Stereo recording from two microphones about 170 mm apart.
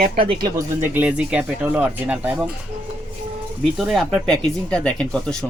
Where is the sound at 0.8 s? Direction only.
10° right (ahead or behind).